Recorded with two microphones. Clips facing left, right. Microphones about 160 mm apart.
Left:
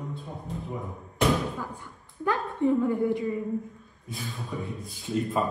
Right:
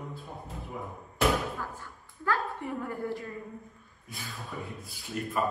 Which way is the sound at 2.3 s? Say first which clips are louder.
Left 7 dB; 20° left (ahead or behind).